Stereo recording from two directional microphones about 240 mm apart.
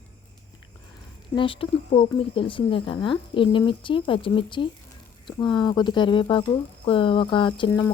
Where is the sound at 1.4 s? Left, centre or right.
Left.